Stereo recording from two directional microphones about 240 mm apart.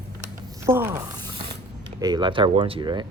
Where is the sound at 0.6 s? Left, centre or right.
Centre.